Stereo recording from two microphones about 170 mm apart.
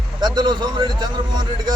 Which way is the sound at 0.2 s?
25° right (ahead or behind).